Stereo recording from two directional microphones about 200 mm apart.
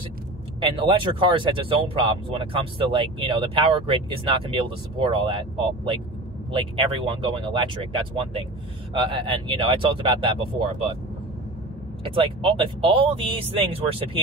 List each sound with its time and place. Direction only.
0.6 s speech: 25° right (ahead or behind)
12.0 s speech: 25° right (ahead or behind)